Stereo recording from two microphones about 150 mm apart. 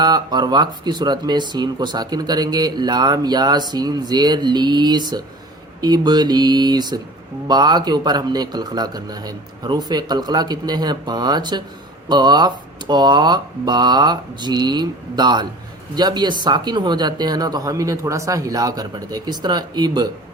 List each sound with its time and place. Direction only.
0.0 s speech: 25° right (ahead or behind)